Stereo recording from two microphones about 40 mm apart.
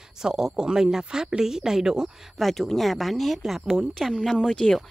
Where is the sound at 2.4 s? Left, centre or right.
Centre.